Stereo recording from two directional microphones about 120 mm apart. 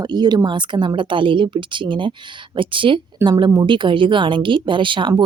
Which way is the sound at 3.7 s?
45° right (ahead or behind).